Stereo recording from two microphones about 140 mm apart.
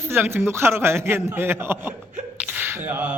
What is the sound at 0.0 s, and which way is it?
A man's voice, 15° right (ahead or behind).